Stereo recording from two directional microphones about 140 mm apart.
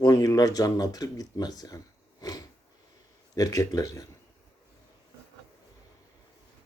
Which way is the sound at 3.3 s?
25° left (ahead or behind).